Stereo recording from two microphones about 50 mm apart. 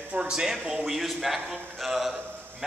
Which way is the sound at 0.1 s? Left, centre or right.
Centre.